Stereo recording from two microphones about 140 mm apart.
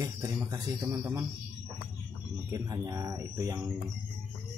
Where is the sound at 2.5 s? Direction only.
25° right (ahead or behind).